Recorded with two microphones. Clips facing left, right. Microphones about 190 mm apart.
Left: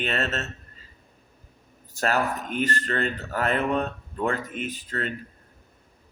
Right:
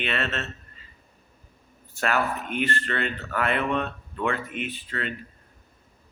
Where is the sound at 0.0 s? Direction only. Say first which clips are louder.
Left 1 dB; 40° left (ahead or behind).